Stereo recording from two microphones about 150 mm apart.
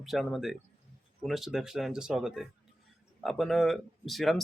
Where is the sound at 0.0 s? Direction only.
Centre (ahead or behind).